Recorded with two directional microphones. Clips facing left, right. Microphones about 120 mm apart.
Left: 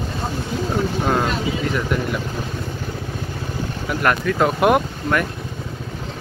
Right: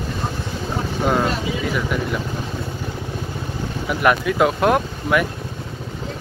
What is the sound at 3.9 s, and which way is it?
Speech, 5° right (ahead or behind).